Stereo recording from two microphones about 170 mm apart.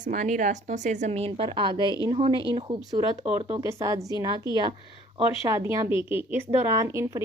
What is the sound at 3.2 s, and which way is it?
Speech, 35° right (ahead or behind).